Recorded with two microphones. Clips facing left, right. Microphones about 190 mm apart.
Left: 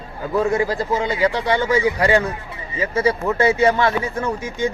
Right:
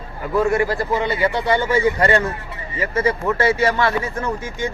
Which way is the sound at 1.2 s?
90° left.